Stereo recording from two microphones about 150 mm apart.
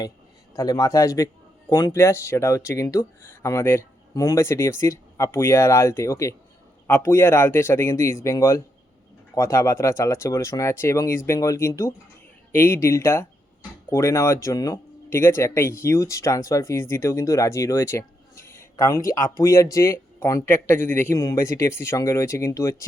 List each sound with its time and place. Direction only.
0.5 s speech: 25° left (ahead or behind)